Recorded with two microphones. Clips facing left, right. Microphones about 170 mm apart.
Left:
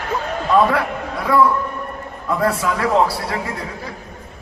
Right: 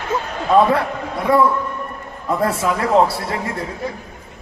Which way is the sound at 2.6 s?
25° right (ahead or behind).